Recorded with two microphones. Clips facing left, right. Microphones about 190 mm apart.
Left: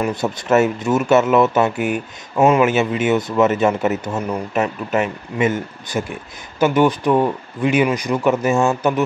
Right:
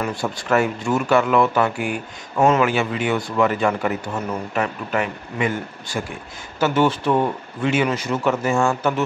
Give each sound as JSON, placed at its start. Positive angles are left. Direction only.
{"t": 0.0, "sound": "speech", "side_deg": 20}